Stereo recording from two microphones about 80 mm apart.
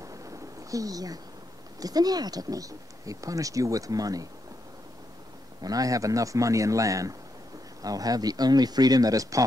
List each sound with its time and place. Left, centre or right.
0.0 s thunder: right
1.8 s speech: right
5.6 s speech: right